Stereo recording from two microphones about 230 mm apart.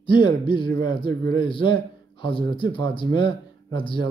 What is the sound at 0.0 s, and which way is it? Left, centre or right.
A man's voice, left.